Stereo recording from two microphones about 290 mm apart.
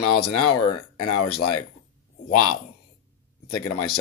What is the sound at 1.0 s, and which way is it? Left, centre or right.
Speech, left.